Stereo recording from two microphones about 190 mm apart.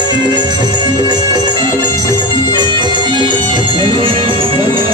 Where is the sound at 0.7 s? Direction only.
20° right (ahead or behind).